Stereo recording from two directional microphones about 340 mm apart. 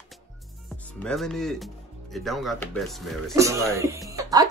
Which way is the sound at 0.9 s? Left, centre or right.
Centre.